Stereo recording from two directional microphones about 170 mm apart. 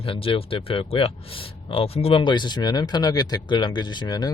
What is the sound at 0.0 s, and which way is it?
Speech, 30° left (ahead or behind).